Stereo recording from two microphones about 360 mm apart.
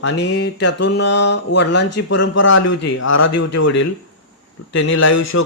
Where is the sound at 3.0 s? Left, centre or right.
Left.